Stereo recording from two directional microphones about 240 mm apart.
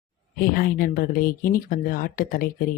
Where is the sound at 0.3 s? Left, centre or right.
Left.